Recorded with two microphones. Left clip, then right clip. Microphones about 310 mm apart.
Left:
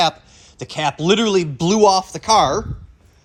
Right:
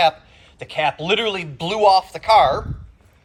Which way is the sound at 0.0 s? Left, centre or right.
Centre.